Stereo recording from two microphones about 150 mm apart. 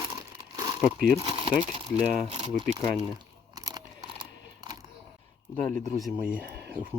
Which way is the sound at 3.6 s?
25° right (ahead or behind).